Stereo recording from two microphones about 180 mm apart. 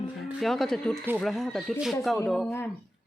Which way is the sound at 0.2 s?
Centre (ahead or behind).